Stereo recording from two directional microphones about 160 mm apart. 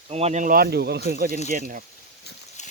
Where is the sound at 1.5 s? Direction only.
55° right (ahead or behind).